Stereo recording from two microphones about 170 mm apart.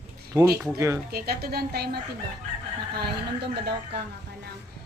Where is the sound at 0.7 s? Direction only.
20° right (ahead or behind).